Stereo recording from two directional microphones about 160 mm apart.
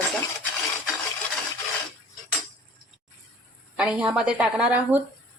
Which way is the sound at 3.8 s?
5° right (ahead or behind).